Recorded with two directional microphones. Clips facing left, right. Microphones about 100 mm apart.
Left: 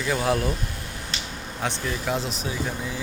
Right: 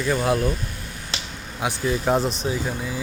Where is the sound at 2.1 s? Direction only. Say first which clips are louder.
Right 6 dB; 35° right (ahead or behind).